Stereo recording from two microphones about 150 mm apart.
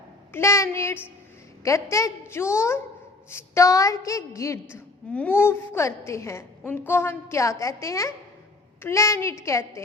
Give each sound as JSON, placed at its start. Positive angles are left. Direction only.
{"t": 0.3, "sound": "a woman's voice", "side_deg": 20}